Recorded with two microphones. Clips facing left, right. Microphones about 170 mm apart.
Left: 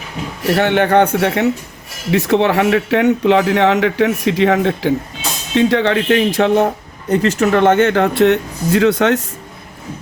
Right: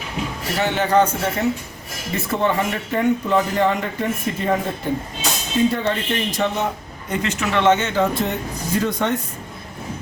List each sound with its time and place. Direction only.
0.4 s speech: 65° left (ahead or behind)
7.1 s speech: 40° left (ahead or behind); by 9.2 s 80° left